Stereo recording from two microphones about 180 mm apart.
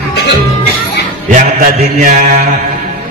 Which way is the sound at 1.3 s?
45° right (ahead or behind).